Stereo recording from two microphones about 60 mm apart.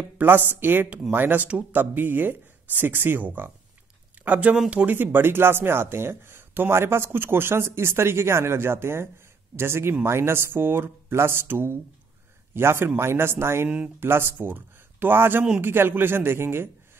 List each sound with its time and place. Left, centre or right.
0.2 s speech: right
4.9 s speech: right